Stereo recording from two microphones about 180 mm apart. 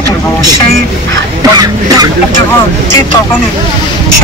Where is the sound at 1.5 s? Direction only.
20° right (ahead or behind).